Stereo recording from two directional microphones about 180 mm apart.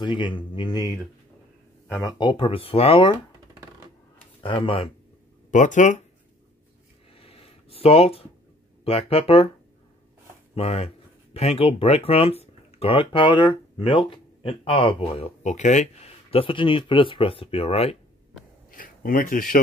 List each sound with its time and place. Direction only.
0.0 s speech: 25° left (ahead or behind)
4.4 s speech: 30° left (ahead or behind)
5.5 s speech: 45° left (ahead or behind)
7.2 s a sound: 30° left (ahead or behind)
8.8 s speech: 35° left (ahead or behind)
10.5 s speech: 35° left (ahead or behind)
18.7 s speech: 50° left (ahead or behind)